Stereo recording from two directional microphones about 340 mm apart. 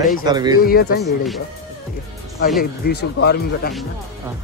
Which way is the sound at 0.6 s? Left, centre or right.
Left.